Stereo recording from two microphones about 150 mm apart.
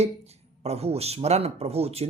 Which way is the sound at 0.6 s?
45° right (ahead or behind).